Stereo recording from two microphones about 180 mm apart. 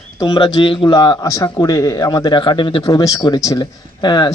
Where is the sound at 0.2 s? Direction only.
25° left (ahead or behind).